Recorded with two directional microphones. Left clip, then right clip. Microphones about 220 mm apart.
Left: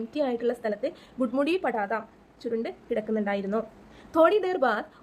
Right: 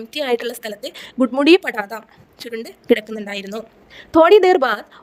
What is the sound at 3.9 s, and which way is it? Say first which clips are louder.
Speech: right 10 dB; 40° right (ahead or behind).